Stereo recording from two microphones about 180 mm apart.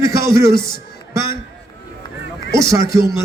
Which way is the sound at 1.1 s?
15° right (ahead or behind).